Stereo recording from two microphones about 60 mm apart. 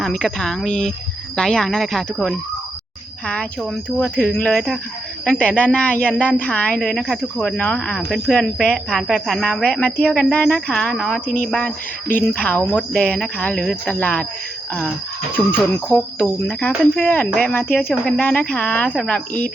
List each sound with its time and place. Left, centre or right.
0.0 s speech: centre
3.8 s speech: centre
9.0 s speech: centre; by 10.8 s left
10.9 s speech: centre
11.6 s speech: left; by 13.9 s centre
14.0 s speech: left
15.4 s speech: left; by 19.5 s centre